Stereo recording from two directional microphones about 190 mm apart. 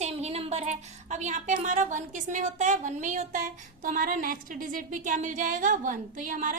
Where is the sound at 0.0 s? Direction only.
35° right (ahead or behind).